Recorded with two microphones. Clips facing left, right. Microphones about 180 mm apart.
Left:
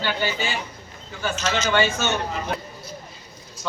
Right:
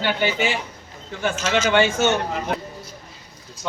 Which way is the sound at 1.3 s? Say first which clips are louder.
Right 3 dB; 10° right (ahead or behind).